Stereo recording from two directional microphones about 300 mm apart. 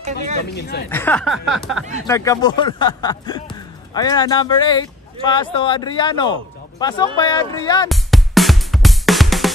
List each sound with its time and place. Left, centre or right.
0.5 s speech: left
0.8 s speech: centre
2.0 s speech: centre
7.9 s music: centre